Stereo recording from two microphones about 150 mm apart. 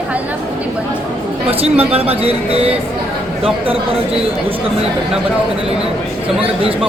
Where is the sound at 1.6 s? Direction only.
40° right (ahead or behind).